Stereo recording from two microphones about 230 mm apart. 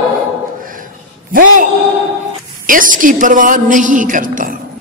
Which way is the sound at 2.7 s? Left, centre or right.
Right.